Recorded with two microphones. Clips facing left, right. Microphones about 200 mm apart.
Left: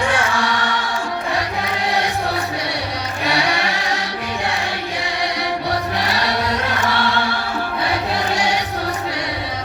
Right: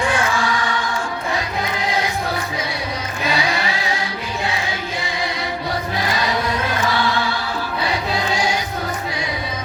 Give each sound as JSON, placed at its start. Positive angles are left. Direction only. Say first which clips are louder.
{"t": 3.2, "sound": "music", "louder": "left 1 dB", "side_deg": 70}
{"t": 8.3, "sound": "music", "louder": "left 1 dB", "side_deg": 65}